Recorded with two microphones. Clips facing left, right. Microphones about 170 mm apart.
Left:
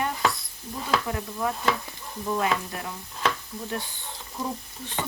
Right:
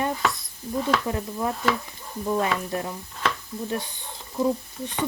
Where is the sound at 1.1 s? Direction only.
20° right (ahead or behind).